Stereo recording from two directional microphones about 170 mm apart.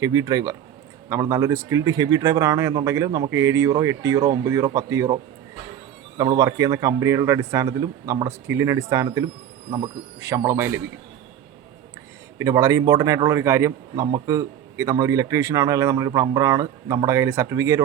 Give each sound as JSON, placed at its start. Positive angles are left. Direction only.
{"t": 0.0, "sound": "a man's voice", "side_deg": -20}
{"t": 12.4, "sound": "a man's voice", "side_deg": -20}